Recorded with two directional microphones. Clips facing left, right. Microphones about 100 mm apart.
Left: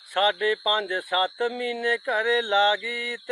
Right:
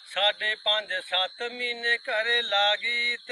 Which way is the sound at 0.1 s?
40° left (ahead or behind).